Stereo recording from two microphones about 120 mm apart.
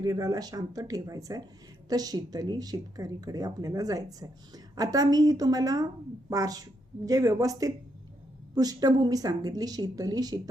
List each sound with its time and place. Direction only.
0.0 s speech: 30° right (ahead or behind)